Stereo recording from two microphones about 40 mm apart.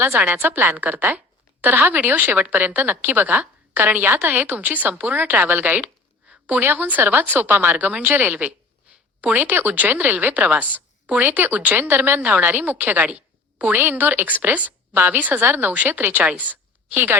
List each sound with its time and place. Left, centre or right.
0.3 s speech: right
0.8 s a woman's voice: right
1.6 s a woman's voice: right
6.3 s a sound: right
6.6 s a woman's voice: right
11.2 s speech: right
12.4 s speech: right
13.1 s a sound: right
13.7 s a woman's voice: right
14.9 s speech: right
15.2 s a woman's voice: right
16.3 s a woman's voice: right
16.9 s a woman's voice: right